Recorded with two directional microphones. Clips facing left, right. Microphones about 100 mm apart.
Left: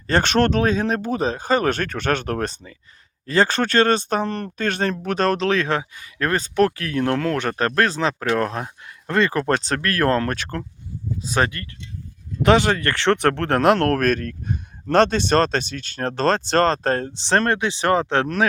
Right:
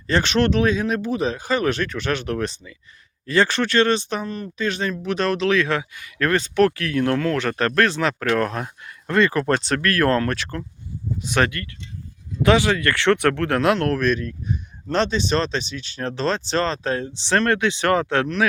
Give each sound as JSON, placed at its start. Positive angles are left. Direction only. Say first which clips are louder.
{"t": 0.1, "sound": "speech", "louder": "left 1 dB", "side_deg": 45}
{"t": 4.3, "sound": "speech", "louder": "left 1 dB", "side_deg": 60}
{"t": 11.3, "sound": "speech", "louder": "right 1 dB", "side_deg": 30}
{"t": 12.5, "sound": "speech", "louder": "left 1 dB", "side_deg": 50}
{"t": 12.7, "sound": "speech", "louder": "right 1 dB", "side_deg": 35}